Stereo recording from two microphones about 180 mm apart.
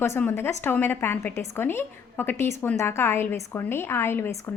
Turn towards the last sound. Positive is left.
turn(degrees=15)  # may be behind; listen again after turning